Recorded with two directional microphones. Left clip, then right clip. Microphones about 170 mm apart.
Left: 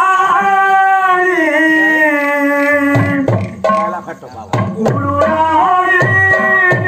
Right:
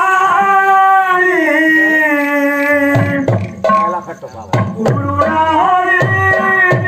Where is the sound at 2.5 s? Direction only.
25° left (ahead or behind).